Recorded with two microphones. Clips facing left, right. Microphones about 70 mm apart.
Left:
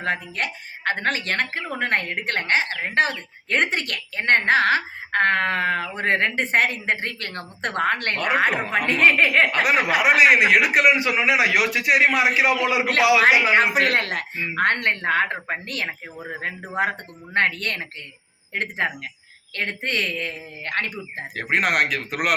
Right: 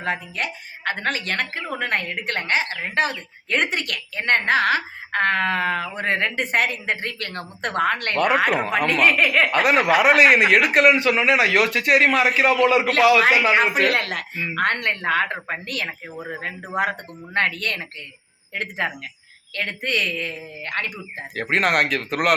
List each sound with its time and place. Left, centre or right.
0.0 s a woman's voice: left
9.5 s a man's voice: centre
13.5 s a woman's voice: left
17.3 s speech: left
21.3 s a man's voice: centre